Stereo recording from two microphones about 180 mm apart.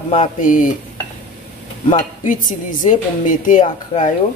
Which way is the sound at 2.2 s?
45° left (ahead or behind).